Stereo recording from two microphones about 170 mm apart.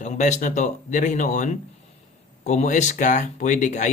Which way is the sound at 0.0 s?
45° left (ahead or behind).